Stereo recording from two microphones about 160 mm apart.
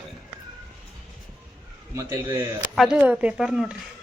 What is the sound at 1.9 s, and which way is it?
Speech, 20° right (ahead or behind).